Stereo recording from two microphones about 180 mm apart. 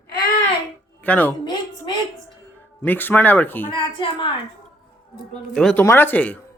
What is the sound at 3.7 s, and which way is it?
Speech, 25° left (ahead or behind).